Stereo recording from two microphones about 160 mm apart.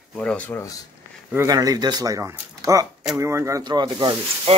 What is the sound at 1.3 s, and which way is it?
Speech, 20° right (ahead or behind).